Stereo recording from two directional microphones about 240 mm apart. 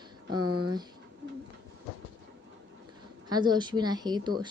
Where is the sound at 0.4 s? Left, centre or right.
Right.